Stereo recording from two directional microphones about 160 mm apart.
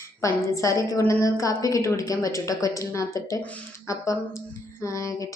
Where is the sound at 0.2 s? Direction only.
20° left (ahead or behind).